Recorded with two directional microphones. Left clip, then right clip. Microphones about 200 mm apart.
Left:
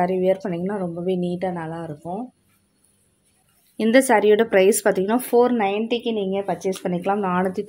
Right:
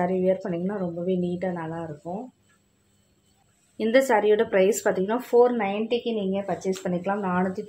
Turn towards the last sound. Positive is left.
turn(degrees=55)  # may be behind; listen again after turning